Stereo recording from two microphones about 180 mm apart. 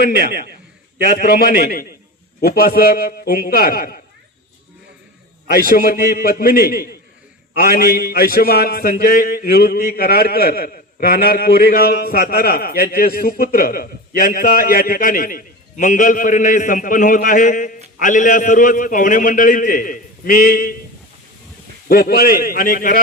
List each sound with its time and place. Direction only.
0.2 s a man's voice: 60° left (ahead or behind)
5.5 s a man's voice: 55° left (ahead or behind)
21.8 s a man's voice: 55° left (ahead or behind)